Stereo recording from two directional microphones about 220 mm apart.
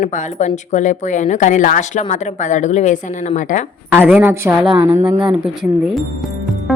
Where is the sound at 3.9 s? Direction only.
10° right (ahead or behind).